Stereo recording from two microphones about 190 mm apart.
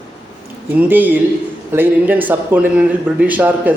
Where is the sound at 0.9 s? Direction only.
10° right (ahead or behind).